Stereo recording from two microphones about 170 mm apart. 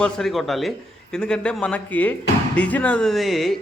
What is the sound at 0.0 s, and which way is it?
Speech, centre (ahead or behind).